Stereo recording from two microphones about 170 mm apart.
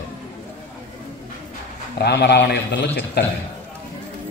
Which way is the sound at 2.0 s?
75° left (ahead or behind).